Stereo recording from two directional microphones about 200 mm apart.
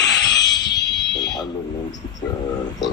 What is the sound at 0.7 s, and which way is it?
Fire alarm, 60° left (ahead or behind).